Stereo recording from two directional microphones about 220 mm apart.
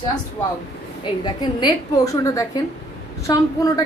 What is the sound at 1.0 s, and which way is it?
A woman's voice, 20° left (ahead or behind).